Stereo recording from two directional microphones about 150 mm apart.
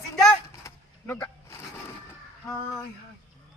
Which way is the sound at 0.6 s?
20° left (ahead or behind).